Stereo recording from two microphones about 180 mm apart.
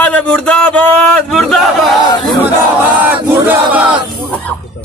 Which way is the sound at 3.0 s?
10° right (ahead or behind).